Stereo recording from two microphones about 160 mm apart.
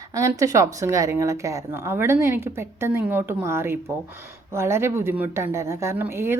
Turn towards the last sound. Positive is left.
turn(degrees=-15)  # may be behind; listen again after turning